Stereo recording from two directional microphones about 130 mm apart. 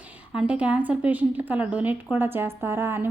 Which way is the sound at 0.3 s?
10° right (ahead or behind).